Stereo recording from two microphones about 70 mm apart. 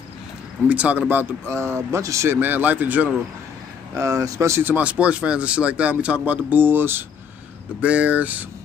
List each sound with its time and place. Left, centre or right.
0.7 s speech: right
1.5 s speech: right
2.4 s speech: right
3.9 s speech: right
4.6 s speech: right
7.8 s speech: centre